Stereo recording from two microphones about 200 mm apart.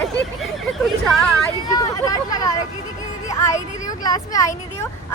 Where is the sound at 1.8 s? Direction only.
20° left (ahead or behind).